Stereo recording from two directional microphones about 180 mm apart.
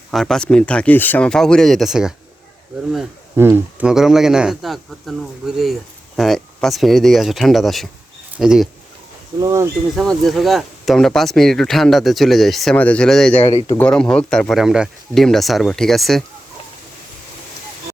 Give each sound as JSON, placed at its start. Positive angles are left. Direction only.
{"t": 0.1, "sound": "speech", "side_deg": 0}
{"t": 3.3, "sound": "speech", "side_deg": -10}
{"t": 9.4, "sound": "speech", "side_deg": -15}
{"t": 9.9, "sound": "speech", "side_deg": 0}